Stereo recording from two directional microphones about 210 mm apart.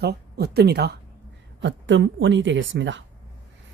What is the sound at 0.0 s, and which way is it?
Speech, 50° right (ahead or behind).